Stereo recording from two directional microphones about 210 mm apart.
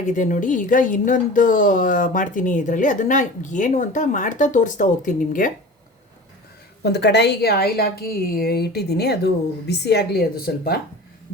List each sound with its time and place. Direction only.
0.0 s speech: 35° left (ahead or behind)
6.8 s a woman's voice: 55° left (ahead or behind)